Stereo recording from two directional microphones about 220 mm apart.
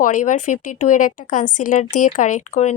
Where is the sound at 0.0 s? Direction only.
35° left (ahead or behind).